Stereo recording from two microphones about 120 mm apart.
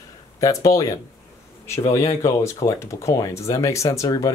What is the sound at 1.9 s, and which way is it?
Speech, 25° left (ahead or behind).